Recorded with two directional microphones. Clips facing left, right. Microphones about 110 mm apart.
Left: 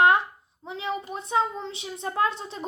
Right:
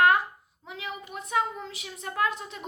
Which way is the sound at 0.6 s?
30° left (ahead or behind).